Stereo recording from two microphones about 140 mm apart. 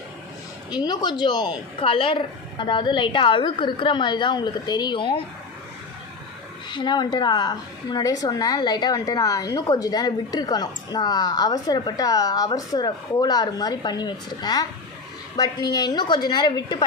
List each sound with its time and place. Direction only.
0.7 s speech: 30° left (ahead or behind)
6.7 s a woman's voice: 30° left (ahead or behind)